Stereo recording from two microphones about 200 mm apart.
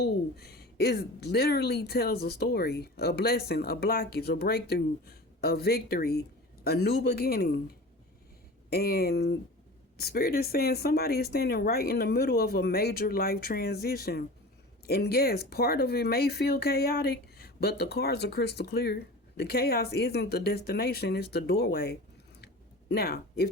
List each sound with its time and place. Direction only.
0.0 s a woman's voice: 50° left (ahead or behind)
8.7 s a woman's voice: 50° left (ahead or behind)